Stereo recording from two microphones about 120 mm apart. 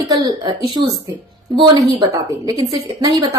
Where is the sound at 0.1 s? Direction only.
35° right (ahead or behind).